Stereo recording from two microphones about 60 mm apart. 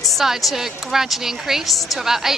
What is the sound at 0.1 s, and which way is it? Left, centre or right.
A woman's voice, centre.